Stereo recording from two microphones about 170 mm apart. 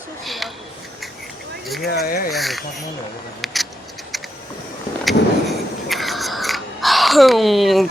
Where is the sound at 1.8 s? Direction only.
70° left (ahead or behind).